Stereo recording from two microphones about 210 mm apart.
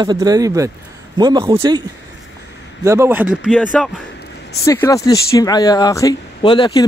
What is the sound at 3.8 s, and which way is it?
Speech, 5° left (ahead or behind).